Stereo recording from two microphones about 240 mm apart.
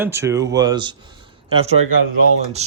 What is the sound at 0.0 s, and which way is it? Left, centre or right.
Speech, centre.